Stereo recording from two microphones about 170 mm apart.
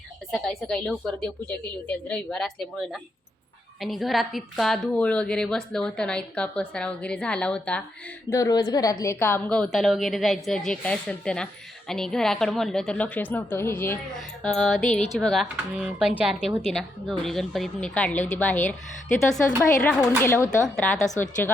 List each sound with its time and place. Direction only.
0.3 s a woman's voice: centre (ahead or behind)
8.3 s a woman's voice: 20° left (ahead or behind)
18.1 s a woman's voice: 45° left (ahead or behind)
18.3 s a woman's voice: 10° left (ahead or behind)